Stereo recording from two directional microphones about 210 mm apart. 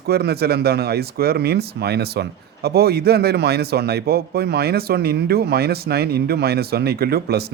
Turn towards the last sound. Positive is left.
turn(degrees=-50)  # may be behind; listen again after turning